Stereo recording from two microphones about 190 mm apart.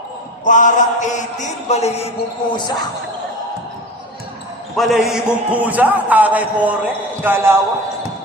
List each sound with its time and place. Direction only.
0.4 s chant: 40° left (ahead or behind); by 2.7 s 25° left (ahead or behind)
4.8 s a man's voice: centre (ahead or behind)